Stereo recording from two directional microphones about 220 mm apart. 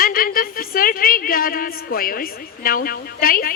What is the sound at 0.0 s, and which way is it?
A woman's voice, 40° left (ahead or behind).